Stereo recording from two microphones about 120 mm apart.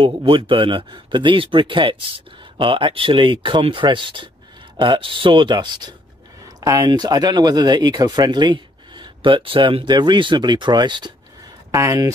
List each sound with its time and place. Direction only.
0.0 s speech: 45° right (ahead or behind)
11.7 s speech: 25° right (ahead or behind)